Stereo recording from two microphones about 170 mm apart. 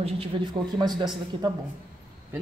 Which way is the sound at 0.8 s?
25° right (ahead or behind).